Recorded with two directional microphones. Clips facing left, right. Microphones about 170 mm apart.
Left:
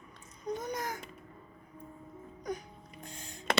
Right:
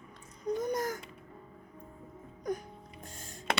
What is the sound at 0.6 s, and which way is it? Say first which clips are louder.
Babbling: right 5 dB; 45° right (ahead or behind).